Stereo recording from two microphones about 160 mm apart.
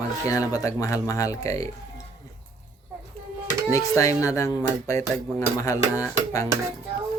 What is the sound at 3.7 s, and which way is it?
Speech, 20° left (ahead or behind).